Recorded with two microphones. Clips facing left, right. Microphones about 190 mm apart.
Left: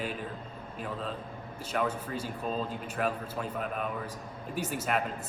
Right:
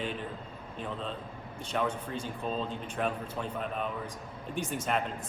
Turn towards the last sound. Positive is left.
turn(degrees=5)  # may be behind; listen again after turning